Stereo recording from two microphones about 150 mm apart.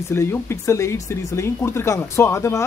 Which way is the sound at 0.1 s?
15° left (ahead or behind).